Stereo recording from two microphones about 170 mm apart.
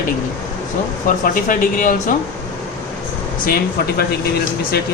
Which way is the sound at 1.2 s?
50° left (ahead or behind).